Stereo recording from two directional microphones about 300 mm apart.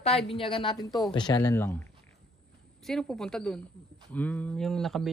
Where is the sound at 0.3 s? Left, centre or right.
Centre.